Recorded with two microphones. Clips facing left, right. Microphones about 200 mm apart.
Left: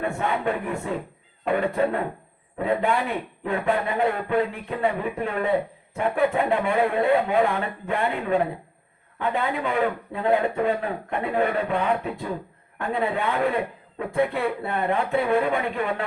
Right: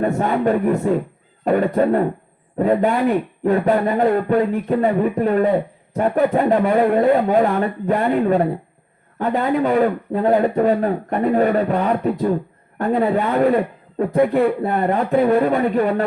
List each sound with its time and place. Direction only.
0.0 s a man's voice: 40° right (ahead or behind)